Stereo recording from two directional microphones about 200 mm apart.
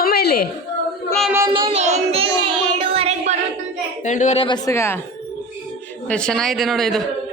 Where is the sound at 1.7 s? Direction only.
30° right (ahead or behind).